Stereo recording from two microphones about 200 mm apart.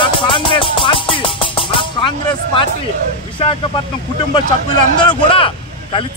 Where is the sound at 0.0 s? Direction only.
25° left (ahead or behind).